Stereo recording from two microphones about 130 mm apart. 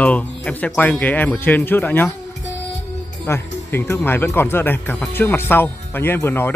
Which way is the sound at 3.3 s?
20° left (ahead or behind).